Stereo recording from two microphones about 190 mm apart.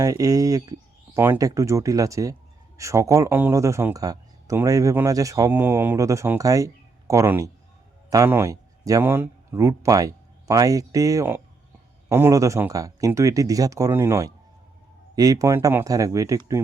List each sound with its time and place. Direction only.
0.0 s speech: 20° right (ahead or behind)